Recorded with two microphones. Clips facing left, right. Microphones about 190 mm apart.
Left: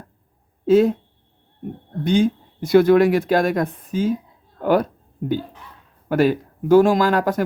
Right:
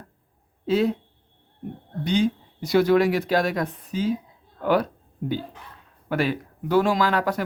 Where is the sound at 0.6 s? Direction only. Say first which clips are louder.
Left 7 dB; 45° left (ahead or behind).